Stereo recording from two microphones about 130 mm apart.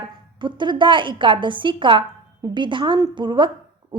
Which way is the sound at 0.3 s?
35° right (ahead or behind).